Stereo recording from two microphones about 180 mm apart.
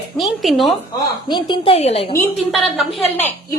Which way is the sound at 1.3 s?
25° left (ahead or behind).